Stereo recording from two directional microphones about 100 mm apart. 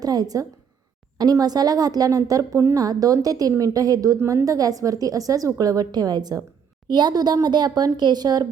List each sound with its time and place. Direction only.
0.0 s a woman's voice: 40° right (ahead or behind)